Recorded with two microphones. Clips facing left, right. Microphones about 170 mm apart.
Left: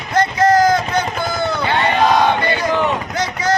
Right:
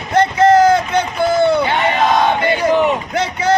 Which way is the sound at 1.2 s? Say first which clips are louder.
Right 8 dB; 60° right (ahead or behind).